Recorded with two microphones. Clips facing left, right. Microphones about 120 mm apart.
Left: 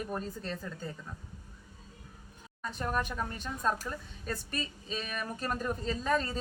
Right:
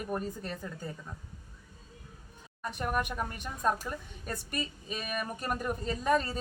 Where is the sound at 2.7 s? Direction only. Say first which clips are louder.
Right 1 dB; 15° right (ahead or behind).